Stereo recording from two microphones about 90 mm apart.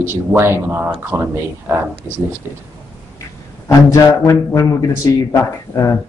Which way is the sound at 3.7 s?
35° left (ahead or behind).